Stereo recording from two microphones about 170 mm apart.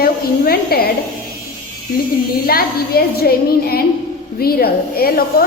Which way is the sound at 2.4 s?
60° left (ahead or behind).